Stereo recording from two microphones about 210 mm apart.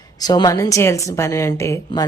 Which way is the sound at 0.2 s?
20° left (ahead or behind).